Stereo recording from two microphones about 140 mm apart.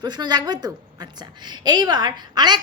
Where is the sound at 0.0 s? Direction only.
30° right (ahead or behind).